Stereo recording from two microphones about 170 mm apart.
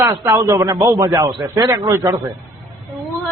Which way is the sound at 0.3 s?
15° right (ahead or behind).